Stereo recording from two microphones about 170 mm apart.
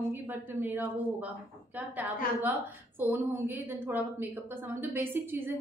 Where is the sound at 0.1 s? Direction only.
10° right (ahead or behind).